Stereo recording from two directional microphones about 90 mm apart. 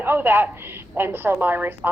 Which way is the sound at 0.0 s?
25° right (ahead or behind).